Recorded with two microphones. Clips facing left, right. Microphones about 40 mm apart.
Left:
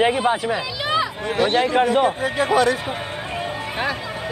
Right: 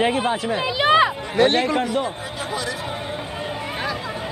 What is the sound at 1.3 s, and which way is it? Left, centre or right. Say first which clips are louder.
Speech: right 1 dB; right.